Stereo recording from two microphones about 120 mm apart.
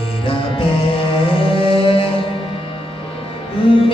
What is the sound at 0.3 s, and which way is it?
Music, 50° left (ahead or behind).